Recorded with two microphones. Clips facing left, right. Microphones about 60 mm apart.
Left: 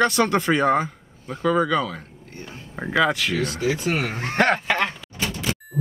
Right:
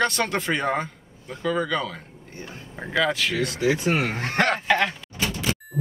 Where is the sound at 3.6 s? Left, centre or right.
Right.